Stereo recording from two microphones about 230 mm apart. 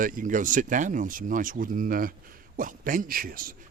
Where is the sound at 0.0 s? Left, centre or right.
Right.